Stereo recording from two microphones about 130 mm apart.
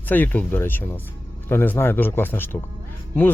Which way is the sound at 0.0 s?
15° left (ahead or behind).